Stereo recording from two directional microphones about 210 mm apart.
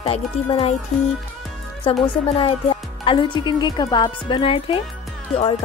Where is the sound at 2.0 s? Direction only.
25° left (ahead or behind).